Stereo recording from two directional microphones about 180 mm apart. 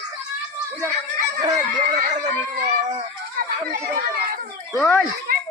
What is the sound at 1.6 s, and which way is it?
Speech, 45° right (ahead or behind).